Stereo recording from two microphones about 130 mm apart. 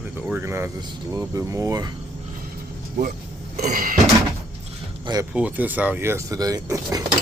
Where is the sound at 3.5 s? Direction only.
75° right (ahead or behind).